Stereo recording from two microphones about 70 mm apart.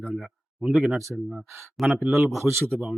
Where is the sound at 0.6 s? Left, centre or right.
Centre.